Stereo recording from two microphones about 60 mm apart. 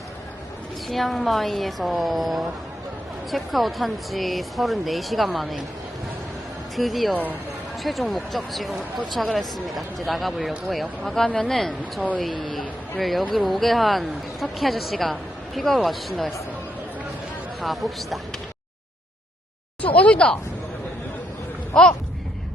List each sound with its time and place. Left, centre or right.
0.9 s a woman's voice: centre
6.7 s a woman's voice: centre
17.6 s a woman's voice: centre
19.8 s speech: left
21.7 s speech: centre